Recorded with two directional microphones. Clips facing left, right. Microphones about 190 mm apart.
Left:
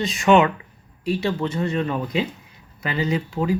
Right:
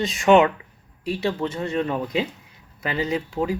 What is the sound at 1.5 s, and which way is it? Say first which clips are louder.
Speech: left 1 dB; 40° right (ahead or behind).